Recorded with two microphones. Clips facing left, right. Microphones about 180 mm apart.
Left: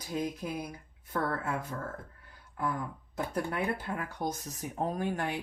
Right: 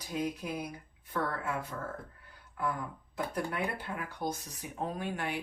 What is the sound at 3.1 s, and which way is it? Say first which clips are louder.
Speech: left 2 dB; 45° left (ahead or behind).